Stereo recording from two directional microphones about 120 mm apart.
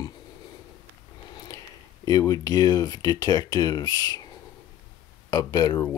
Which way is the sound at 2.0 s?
30° left (ahead or behind).